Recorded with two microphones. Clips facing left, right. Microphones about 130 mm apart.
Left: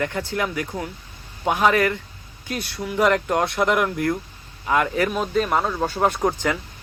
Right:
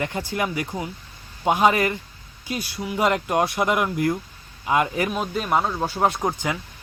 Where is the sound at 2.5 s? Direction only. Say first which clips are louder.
Even; 5° right (ahead or behind).